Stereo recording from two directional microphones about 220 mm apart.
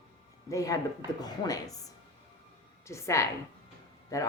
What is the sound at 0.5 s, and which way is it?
A woman's voice, 15° left (ahead or behind).